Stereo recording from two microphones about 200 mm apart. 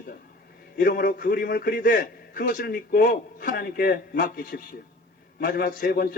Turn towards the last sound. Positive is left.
turn(degrees=45)  # may be behind; listen again after turning